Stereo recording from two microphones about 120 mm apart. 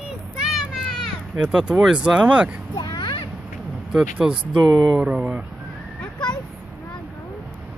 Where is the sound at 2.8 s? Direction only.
35° left (ahead or behind).